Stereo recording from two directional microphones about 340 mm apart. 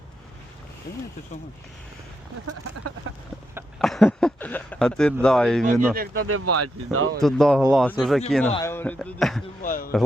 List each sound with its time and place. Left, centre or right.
3.5 s speech: centre
5.9 s speech: right
6.2 s speech: right
7.2 s speech: centre
9.6 s speech: left